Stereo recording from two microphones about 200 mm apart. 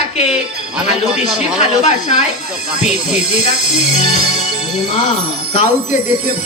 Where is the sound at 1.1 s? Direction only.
Centre (ahead or behind).